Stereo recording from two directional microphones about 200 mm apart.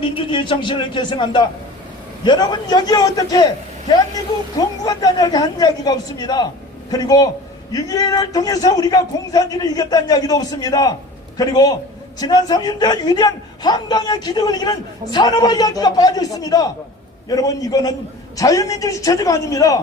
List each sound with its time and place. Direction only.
0.0 s a man's voice: 25° left (ahead or behind)